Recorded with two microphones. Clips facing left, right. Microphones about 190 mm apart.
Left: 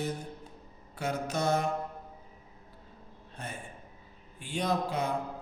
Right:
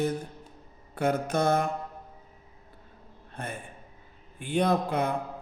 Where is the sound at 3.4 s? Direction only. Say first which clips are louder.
Right 4 dB; 55° right (ahead or behind).